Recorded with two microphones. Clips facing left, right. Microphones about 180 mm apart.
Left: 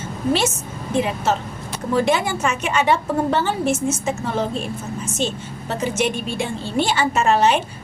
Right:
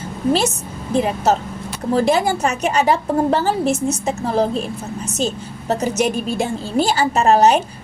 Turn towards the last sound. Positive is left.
turn(degrees=-40)  # may be behind; listen again after turning